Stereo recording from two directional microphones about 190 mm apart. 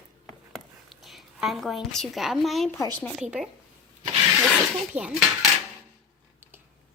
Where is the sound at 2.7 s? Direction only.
15° left (ahead or behind).